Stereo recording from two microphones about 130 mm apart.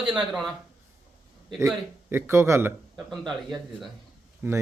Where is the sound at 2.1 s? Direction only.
20° right (ahead or behind).